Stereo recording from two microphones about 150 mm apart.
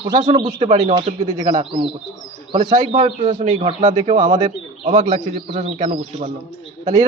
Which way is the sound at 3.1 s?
55° right (ahead or behind).